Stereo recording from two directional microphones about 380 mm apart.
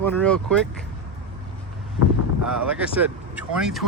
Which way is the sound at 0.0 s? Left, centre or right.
Centre.